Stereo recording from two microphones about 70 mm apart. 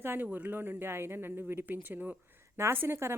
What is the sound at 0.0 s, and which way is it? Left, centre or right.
Speech, right.